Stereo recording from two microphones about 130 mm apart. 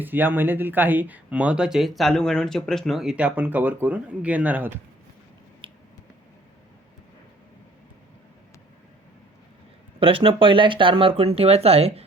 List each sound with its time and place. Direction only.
0.0 s speech: 15° right (ahead or behind)
5.6 s finger snapping: 40° right (ahead or behind)
10.0 s speech: 45° right (ahead or behind)